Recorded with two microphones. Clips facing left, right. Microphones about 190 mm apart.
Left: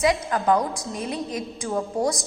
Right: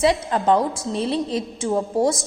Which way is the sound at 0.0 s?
30° right (ahead or behind).